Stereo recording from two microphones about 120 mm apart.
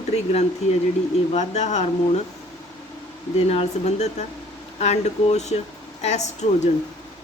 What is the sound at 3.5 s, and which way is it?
Speech, 65° left (ahead or behind).